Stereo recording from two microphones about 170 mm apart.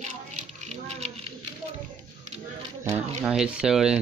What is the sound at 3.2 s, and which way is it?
Speech, 5° right (ahead or behind).